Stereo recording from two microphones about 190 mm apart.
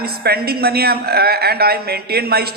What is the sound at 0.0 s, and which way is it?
A woman's voice, 55° right (ahead or behind).